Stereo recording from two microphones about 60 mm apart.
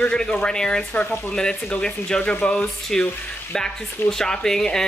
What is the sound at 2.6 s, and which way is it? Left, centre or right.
A woman's voice, centre.